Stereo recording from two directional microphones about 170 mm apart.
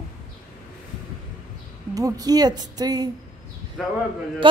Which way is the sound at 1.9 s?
20° right (ahead or behind).